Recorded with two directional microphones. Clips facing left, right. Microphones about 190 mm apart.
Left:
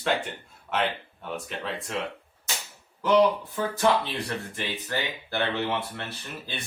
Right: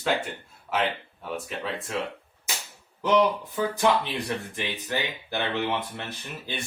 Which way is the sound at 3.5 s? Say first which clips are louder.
Even; 15° right (ahead or behind).